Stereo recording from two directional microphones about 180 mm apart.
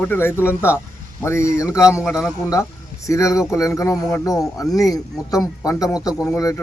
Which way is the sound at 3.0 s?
15° left (ahead or behind).